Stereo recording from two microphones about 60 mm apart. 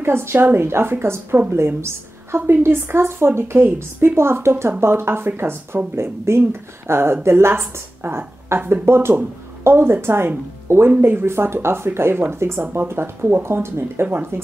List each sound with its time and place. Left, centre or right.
0.0 s a woman's voice: right